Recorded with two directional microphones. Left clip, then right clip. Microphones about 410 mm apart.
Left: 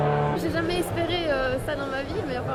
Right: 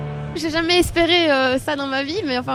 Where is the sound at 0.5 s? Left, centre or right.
Right.